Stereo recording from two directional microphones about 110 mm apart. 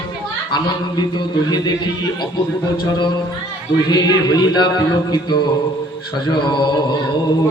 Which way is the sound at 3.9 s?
35° left (ahead or behind).